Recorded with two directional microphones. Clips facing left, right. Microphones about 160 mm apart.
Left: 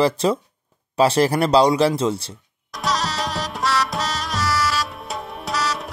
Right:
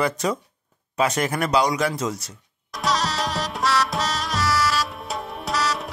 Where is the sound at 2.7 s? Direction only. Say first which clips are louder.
Even; centre (ahead or behind).